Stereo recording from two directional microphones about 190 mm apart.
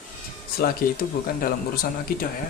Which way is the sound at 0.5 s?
50° left (ahead or behind).